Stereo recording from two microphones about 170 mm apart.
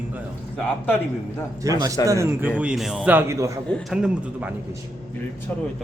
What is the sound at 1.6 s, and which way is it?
Speech, 20° right (ahead or behind).